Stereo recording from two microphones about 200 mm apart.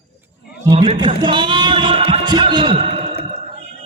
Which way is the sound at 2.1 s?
25° right (ahead or behind).